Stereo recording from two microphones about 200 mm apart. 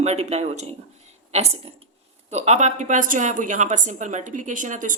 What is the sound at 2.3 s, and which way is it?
Speech, 35° right (ahead or behind).